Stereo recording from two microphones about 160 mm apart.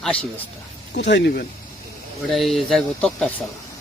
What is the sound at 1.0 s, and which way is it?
Speech, 90° left.